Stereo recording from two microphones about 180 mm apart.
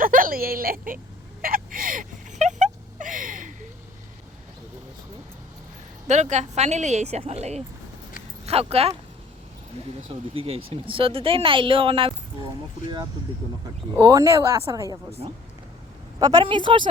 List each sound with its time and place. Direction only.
0.0 s speech: 50° right (ahead or behind)
1.4 s a sound: 50° right (ahead or behind)
6.1 s a woman's voice: 40° right (ahead or behind)
10.1 s speech: 35° right (ahead or behind)
14.0 s speech: 20° right (ahead or behind)
15.2 s a woman's voice: 35° right (ahead or behind)
16.1 s speech: 20° right (ahead or behind)